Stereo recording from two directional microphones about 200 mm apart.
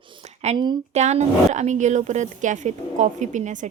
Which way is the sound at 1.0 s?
35° right (ahead or behind).